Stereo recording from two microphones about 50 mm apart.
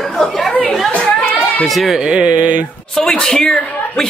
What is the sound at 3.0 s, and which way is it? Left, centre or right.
Speech, centre.